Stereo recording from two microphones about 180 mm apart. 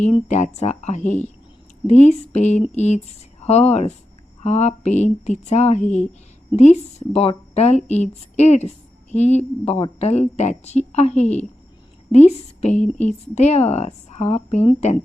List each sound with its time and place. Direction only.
0.1 s a woman's voice: 40° left (ahead or behind)